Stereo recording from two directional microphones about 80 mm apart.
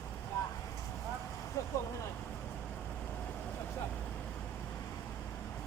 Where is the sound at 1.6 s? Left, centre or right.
Left.